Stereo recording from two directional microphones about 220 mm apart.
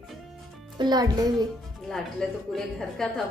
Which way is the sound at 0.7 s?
20° right (ahead or behind).